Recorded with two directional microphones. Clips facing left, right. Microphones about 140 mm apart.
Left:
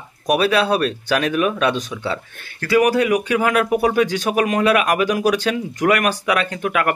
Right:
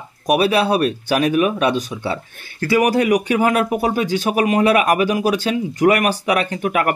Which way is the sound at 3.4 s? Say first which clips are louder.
Right 1 dB; 35° right (ahead or behind).